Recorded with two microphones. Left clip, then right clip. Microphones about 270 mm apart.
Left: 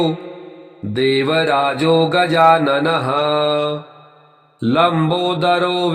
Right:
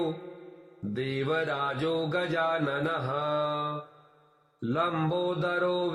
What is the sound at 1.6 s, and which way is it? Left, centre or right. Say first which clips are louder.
Mantra: left 15 dB; left.